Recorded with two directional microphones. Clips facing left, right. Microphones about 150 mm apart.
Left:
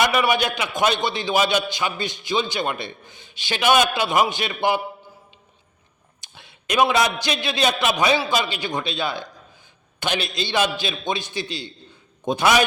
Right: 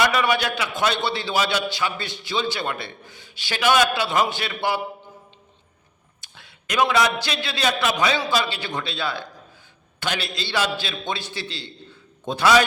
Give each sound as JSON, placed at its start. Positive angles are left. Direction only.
{"t": 0.0, "sound": "a man's voice", "side_deg": 15}
{"t": 6.2, "sound": "a man's voice", "side_deg": 20}